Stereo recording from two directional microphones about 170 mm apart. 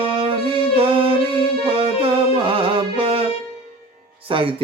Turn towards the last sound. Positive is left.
turn(degrees=-30)  # may be behind; listen again after turning